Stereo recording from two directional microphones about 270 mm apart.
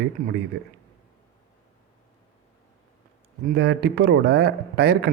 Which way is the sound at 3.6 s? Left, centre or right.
Right.